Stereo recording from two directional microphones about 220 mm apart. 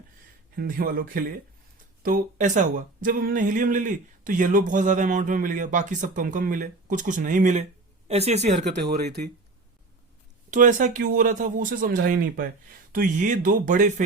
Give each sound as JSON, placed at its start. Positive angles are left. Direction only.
{"t": 0.5, "sound": "speech", "side_deg": -40}
{"t": 8.5, "sound": "speech", "side_deg": -45}
{"t": 10.5, "sound": "speech", "side_deg": -35}